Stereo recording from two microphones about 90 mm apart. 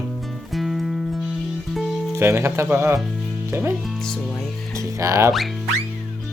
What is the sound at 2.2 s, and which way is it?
Speech, 30° right (ahead or behind).